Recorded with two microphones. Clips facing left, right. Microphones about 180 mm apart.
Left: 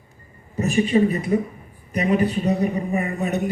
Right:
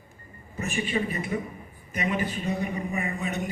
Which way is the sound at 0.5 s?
35° left (ahead or behind).